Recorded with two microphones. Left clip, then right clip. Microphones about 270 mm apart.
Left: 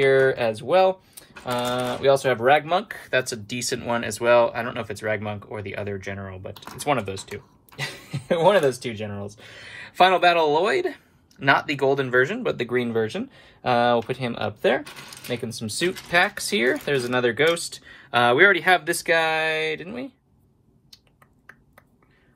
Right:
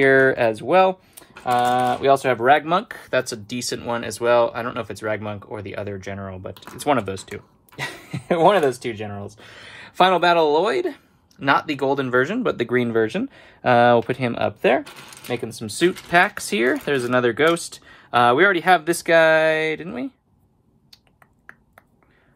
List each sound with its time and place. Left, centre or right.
0.0 s speech: right
8.3 s speech: right
16.1 s speech: right